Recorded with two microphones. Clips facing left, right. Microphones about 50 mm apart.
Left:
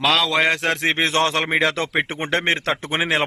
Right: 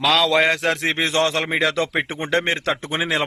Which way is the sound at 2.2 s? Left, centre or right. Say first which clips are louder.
Right 3 dB; left.